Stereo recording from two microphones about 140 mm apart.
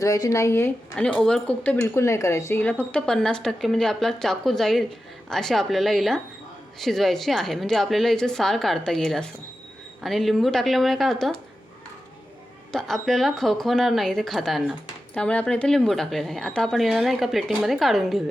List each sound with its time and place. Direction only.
0.0 s speech: 25° left (ahead or behind)
0.9 s speech: 5° left (ahead or behind)
1.8 s speech: 20° left (ahead or behind); by 11.3 s centre (ahead or behind)
12.7 s speech: centre (ahead or behind)